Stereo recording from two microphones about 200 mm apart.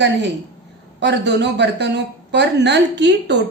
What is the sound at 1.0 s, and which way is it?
A woman's voice, 60° right (ahead or behind).